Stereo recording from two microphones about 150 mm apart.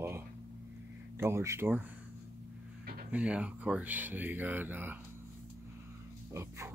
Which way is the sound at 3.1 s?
10° right (ahead or behind).